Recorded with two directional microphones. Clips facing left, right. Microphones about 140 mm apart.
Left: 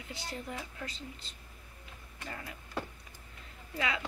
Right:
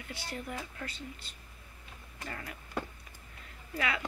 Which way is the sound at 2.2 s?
20° left (ahead or behind).